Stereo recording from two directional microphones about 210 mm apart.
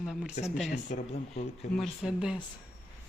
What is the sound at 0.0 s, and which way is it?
Speech, centre (ahead or behind).